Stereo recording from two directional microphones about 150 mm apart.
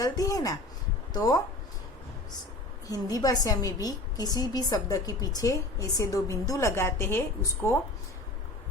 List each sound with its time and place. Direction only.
0.0 s a woman's voice: 25° left (ahead or behind)
2.8 s a woman's voice: 25° left (ahead or behind)